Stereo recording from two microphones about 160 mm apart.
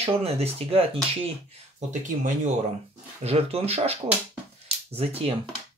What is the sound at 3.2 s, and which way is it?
Speech, 40° right (ahead or behind).